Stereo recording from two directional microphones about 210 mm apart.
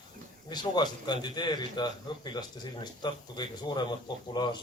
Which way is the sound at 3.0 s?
20° left (ahead or behind).